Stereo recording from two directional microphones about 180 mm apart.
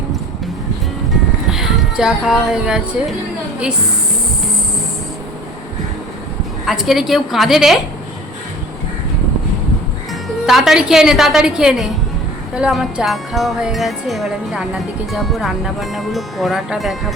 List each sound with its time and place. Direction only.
1.5 s speech: centre (ahead or behind)
6.7 s speech: centre (ahead or behind)
10.4 s speech: centre (ahead or behind)